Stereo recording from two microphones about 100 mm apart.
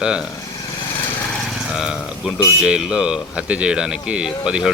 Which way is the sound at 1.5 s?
5° right (ahead or behind).